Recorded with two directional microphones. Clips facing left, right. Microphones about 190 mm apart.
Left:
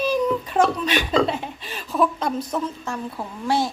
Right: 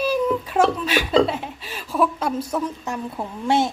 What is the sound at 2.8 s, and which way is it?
Speech, 20° right (ahead or behind).